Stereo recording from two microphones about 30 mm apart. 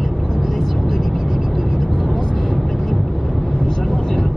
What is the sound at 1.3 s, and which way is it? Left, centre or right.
Vehicle, centre.